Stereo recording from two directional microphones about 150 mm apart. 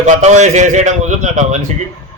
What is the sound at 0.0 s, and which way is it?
A man's voice, 50° right (ahead or behind).